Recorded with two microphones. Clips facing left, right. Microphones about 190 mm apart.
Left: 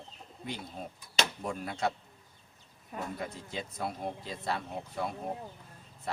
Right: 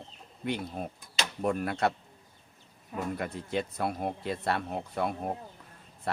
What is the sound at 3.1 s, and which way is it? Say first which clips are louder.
Speech: right 6 dB; 65° right (ahead or behind).